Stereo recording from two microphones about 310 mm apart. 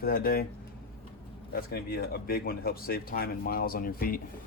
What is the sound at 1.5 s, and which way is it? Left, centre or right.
Speech, left.